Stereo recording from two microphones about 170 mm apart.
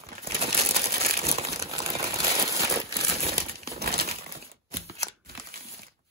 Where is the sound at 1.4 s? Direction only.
20° right (ahead or behind).